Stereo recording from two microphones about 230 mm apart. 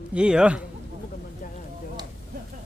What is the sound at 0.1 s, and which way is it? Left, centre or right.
Speech, centre.